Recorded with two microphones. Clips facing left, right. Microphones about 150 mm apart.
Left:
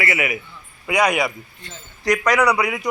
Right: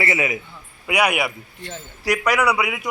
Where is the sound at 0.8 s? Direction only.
10° right (ahead or behind).